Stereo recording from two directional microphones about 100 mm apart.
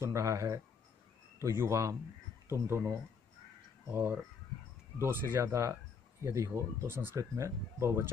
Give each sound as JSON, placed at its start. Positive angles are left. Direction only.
{"t": 0.0, "sound": "speech", "side_deg": -30}